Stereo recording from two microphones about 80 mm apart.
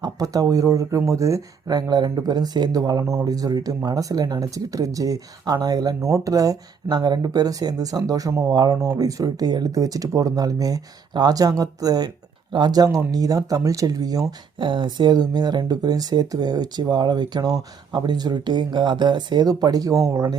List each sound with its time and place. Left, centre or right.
0.0 s speech: right
3.0 s speech: right
3.2 s speech: right
14.6 s speech: right